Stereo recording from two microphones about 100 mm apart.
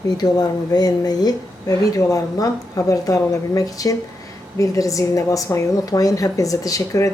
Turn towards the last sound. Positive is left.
turn(degrees=30)  # may be behind; listen again after turning